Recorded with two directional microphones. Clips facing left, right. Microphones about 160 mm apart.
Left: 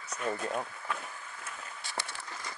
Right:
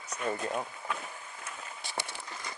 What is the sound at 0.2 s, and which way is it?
Speech, 10° right (ahead or behind).